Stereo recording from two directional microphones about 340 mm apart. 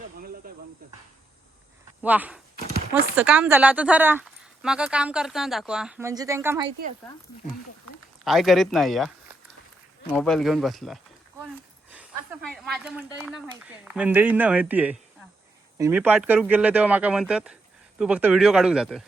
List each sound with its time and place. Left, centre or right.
0.4 s snake: right
2.0 s speech: centre
6.7 s speech: right
8.2 s speech: centre